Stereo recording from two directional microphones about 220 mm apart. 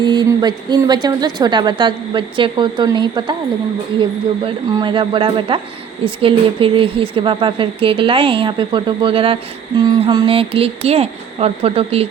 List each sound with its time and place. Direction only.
0.0 s a woman's voice: 20° right (ahead or behind)
4.4 s a woman's voice: 20° right (ahead or behind)